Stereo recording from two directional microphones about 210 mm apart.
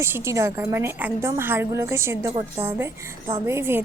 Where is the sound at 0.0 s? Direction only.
10° right (ahead or behind).